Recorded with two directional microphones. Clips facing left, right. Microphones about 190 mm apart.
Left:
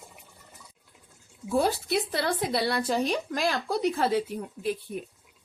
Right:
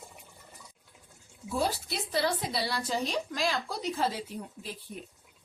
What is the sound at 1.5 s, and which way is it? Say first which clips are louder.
Speech: left 6 dB; 55° left (ahead or behind).